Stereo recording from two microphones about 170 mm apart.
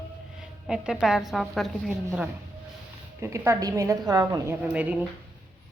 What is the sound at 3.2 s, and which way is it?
A woman's voice, 15° right (ahead or behind).